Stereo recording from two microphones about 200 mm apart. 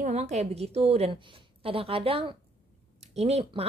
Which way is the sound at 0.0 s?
35° right (ahead or behind).